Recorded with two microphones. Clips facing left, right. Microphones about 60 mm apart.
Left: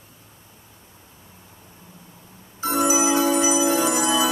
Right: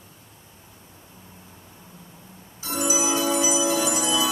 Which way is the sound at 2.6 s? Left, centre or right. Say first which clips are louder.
Left 5 dB; left.